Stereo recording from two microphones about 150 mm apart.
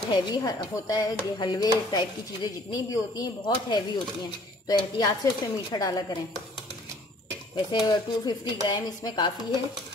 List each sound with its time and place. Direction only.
0.1 s speech: 30° left (ahead or behind)
7.5 s speech: 30° left (ahead or behind)